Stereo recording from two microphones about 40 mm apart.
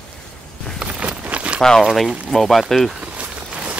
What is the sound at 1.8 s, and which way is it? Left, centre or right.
Speech, centre.